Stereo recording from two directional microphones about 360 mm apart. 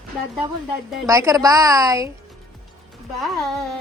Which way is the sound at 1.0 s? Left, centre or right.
Centre.